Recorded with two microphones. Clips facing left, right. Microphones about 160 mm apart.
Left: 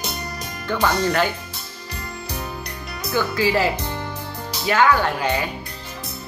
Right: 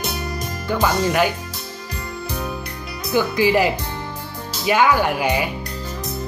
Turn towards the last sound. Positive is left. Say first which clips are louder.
# right 2 dB
turn(degrees=-15)  # may be behind; listen again after turning